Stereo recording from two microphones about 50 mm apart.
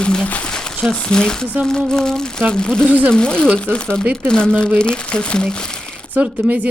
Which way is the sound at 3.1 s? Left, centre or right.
Centre.